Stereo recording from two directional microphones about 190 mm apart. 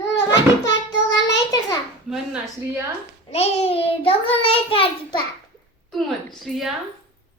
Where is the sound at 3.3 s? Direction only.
35° left (ahead or behind).